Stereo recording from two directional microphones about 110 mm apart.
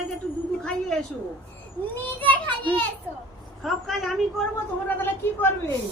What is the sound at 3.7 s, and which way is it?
Speech, centre (ahead or behind).